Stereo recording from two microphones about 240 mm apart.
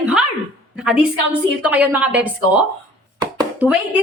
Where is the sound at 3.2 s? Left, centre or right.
Centre.